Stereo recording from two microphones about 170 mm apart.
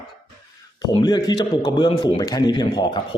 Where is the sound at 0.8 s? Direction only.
25° left (ahead or behind).